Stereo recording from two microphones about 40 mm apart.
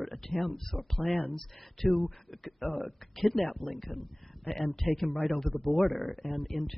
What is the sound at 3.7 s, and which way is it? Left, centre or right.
Speech, left.